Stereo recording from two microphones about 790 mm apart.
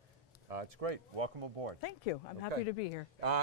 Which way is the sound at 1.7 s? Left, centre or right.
Left.